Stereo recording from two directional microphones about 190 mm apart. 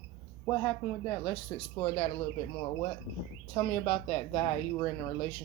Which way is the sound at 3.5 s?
25° left (ahead or behind).